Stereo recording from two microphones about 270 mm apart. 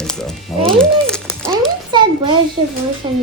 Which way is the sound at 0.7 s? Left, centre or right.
Centre.